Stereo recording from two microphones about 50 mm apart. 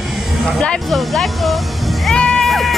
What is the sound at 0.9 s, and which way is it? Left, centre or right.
Speech, centre.